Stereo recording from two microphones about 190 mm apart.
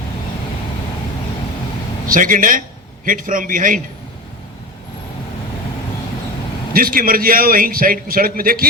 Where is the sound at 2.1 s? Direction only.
45° right (ahead or behind).